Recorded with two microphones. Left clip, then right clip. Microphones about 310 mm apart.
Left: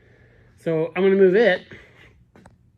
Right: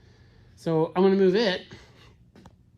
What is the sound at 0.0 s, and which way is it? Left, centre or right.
Speech, centre.